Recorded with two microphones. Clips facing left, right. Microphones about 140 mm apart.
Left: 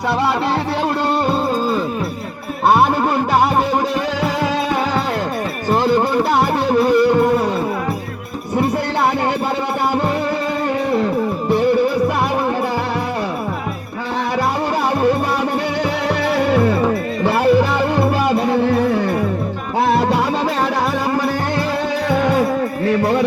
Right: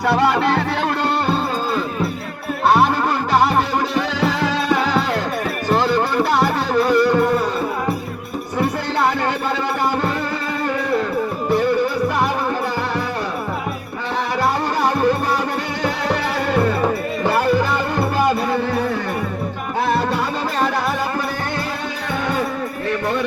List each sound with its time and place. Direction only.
5.6 s music: 50° left (ahead or behind)
17.4 s music: 70° left (ahead or behind)
19.9 s music: 80° left